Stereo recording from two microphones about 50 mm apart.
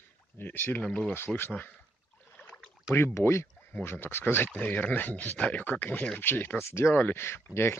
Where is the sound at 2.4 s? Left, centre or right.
Left.